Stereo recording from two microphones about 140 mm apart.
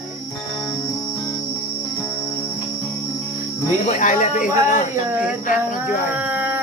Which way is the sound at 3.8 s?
60° left (ahead or behind).